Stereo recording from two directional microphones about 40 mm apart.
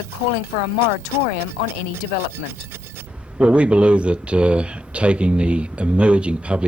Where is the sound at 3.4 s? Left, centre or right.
Right.